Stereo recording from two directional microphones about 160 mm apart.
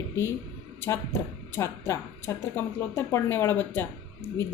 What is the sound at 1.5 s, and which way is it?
Speech, 15° left (ahead or behind).